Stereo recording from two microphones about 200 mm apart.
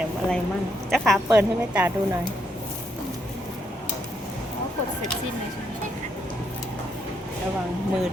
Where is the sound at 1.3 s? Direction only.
10° right (ahead or behind).